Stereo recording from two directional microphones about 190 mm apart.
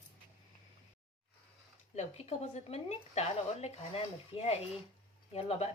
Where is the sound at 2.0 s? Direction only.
35° left (ahead or behind).